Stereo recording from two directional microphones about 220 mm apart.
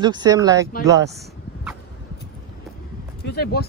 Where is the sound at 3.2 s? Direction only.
45° left (ahead or behind).